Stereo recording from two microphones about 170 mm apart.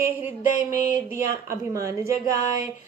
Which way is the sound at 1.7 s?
15° right (ahead or behind).